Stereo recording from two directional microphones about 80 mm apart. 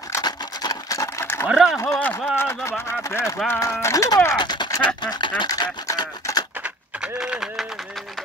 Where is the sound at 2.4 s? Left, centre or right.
Left.